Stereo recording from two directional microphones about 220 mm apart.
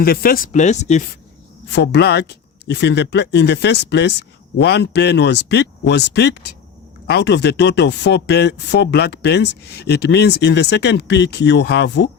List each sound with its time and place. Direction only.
0.0 s speech: 40° left (ahead or behind)
1.6 s speech: 50° left (ahead or behind)